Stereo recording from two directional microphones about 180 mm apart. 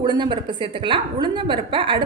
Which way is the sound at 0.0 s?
25° right (ahead or behind).